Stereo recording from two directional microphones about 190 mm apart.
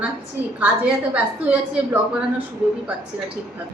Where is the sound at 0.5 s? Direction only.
5° right (ahead or behind).